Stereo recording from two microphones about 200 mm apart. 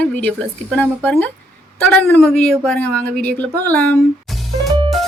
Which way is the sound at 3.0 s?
50° right (ahead or behind).